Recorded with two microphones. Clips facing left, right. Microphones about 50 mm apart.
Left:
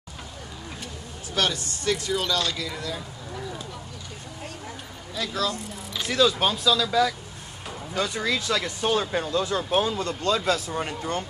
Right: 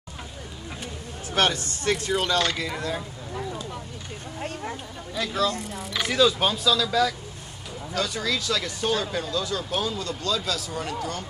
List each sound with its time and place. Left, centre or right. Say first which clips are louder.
1.3 s speech: right 3 dB; right
2.7 s speech: right 3 dB; right
5.1 s speech: right 2 dB; centre
5.9 s a sound: right 4 dB; right
6.4 s speech: even; centre
7.9 s speech: left 1 dB; left